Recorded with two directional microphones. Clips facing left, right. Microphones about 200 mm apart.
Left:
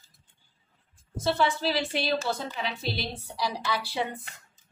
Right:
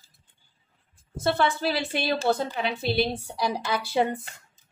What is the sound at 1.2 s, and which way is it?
A woman's voice, 55° right (ahead or behind).